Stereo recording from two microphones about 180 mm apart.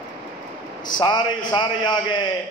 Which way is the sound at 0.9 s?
25° left (ahead or behind).